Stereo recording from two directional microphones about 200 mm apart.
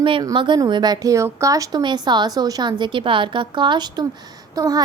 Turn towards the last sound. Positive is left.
turn(degrees=-20)  # may be behind; listen again after turning